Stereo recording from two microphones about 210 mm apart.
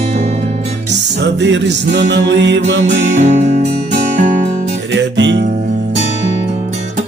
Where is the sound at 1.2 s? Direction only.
55° right (ahead or behind).